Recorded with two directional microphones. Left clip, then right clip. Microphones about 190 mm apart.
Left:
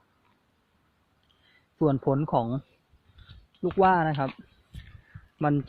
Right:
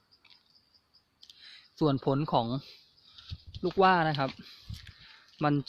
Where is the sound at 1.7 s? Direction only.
25° right (ahead or behind).